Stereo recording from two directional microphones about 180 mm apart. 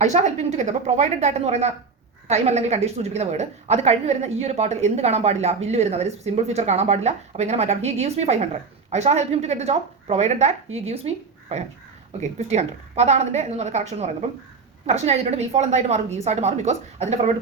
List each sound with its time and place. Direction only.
0.0 s a woman's voice: 40° right (ahead or behind)